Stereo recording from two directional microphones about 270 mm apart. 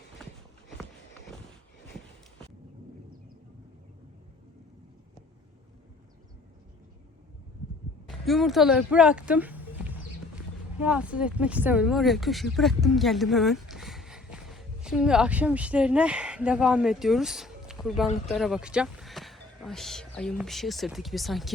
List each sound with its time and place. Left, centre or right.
8.2 s speech: centre